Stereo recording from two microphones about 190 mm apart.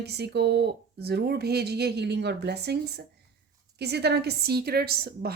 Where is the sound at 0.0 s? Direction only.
60° right (ahead or behind).